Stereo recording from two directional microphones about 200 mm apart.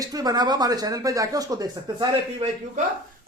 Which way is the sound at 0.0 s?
20° right (ahead or behind).